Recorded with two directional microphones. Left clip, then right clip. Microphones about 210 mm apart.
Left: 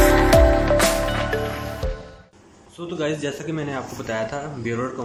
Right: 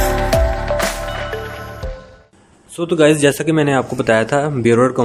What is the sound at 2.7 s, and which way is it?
Speech, 60° right (ahead or behind).